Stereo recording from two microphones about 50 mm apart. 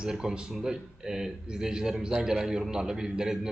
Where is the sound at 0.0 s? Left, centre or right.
Centre.